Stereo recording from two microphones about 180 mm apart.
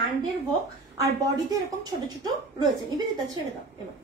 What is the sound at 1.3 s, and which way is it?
A woman's voice, 20° right (ahead or behind).